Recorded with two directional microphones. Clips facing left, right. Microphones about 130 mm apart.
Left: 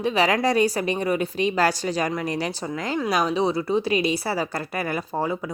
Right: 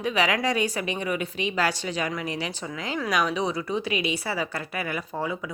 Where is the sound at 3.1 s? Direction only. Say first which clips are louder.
Left 3 dB; 30° left (ahead or behind).